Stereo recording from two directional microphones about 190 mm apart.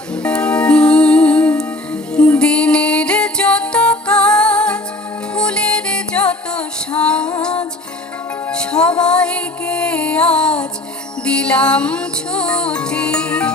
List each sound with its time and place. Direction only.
0.2 s music: 5° left (ahead or behind)